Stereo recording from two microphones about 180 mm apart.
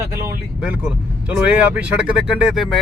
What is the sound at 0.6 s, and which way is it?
Speech, 5° right (ahead or behind).